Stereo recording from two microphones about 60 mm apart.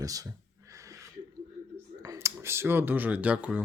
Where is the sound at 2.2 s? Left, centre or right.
Right.